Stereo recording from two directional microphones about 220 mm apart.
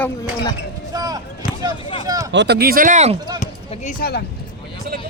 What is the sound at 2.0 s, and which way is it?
Speech, 15° right (ahead or behind).